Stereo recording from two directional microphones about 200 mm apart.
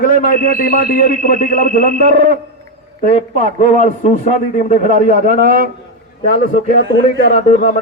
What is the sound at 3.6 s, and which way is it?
A man's voice, 35° left (ahead or behind).